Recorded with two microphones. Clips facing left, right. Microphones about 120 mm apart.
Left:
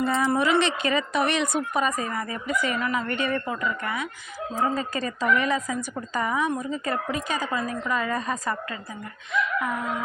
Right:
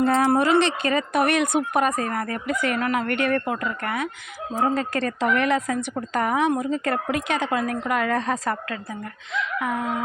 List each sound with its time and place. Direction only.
0.0 s speech: 60° right (ahead or behind)
0.4 s speech: 40° right (ahead or behind); by 4.1 s 55° right (ahead or behind)
4.5 s a woman's voice: 65° right (ahead or behind)